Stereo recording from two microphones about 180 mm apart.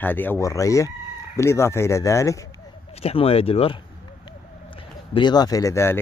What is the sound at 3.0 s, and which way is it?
Speech, 30° left (ahead or behind).